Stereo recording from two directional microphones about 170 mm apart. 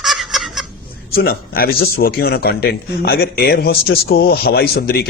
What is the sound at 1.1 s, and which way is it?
Speech, 60° left (ahead or behind).